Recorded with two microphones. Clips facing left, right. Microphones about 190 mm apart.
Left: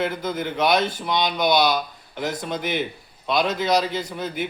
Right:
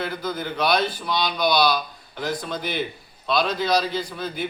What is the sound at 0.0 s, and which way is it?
A man's voice, 20° left (ahead or behind).